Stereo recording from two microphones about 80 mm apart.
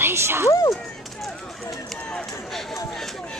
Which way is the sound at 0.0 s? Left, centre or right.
Right.